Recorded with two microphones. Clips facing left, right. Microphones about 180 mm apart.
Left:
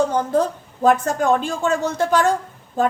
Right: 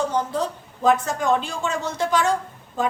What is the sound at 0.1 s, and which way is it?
A woman's voice, 50° left (ahead or behind).